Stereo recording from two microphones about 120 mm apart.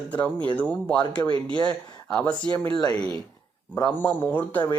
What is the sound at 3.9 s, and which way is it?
Speech, 15° left (ahead or behind).